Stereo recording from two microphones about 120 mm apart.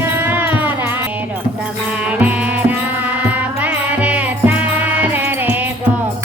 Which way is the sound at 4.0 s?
10° right (ahead or behind).